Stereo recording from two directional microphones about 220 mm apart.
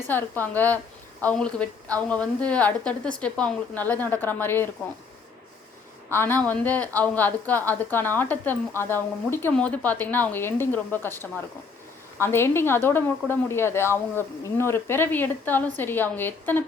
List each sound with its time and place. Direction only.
0.1 s a woman's voice: 10° left (ahead or behind)
6.1 s a woman's voice: 10° left (ahead or behind)